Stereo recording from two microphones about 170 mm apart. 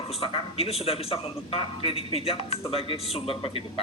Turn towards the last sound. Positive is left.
turn(degrees=35)  # may be behind; listen again after turning